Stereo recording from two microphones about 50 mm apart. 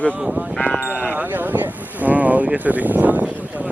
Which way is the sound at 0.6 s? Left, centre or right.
Left.